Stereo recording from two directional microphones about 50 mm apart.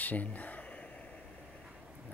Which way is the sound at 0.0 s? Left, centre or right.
Left.